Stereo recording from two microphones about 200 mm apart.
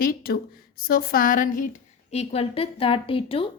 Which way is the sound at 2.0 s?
30° left (ahead or behind).